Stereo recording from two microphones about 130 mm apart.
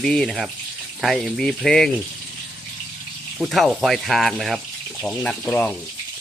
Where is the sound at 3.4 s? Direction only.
Centre (ahead or behind).